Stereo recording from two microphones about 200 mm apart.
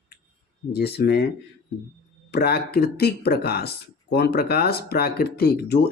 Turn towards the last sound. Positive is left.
turn(degrees=50)  # may be behind; listen again after turning